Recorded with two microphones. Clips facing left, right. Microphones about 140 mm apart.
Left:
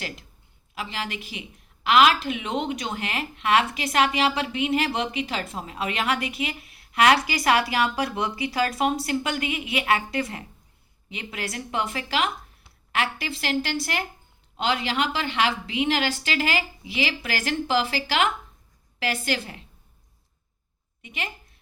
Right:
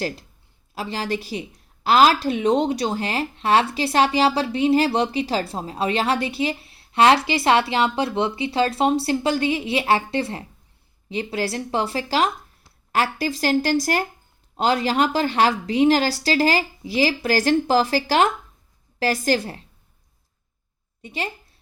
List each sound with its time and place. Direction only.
0.7 s a woman's voice: 35° right (ahead or behind)
21.0 s a woman's voice: 35° right (ahead or behind)